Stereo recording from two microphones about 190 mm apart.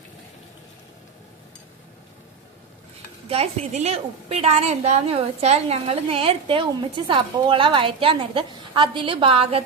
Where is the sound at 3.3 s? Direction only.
35° right (ahead or behind).